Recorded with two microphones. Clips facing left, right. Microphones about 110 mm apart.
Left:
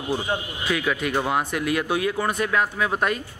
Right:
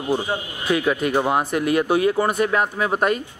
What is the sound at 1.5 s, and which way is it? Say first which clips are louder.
Speech: right 5 dB; 45° right (ahead or behind).